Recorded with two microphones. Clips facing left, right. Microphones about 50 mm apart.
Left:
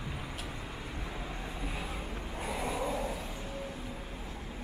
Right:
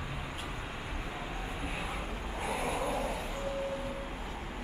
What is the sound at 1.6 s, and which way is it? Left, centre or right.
Vehicle, centre.